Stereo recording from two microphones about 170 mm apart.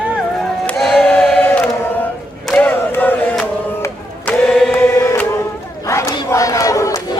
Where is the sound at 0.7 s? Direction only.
Centre (ahead or behind).